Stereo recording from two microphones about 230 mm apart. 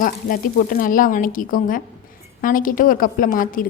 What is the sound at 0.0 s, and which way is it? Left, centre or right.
A woman's voice, left.